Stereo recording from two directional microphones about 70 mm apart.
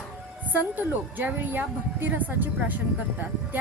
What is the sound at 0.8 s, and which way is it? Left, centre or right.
Speech, right.